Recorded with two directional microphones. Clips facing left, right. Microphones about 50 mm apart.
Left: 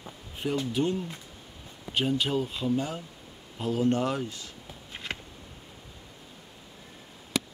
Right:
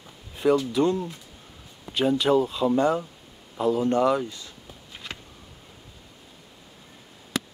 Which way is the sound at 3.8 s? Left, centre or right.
Right.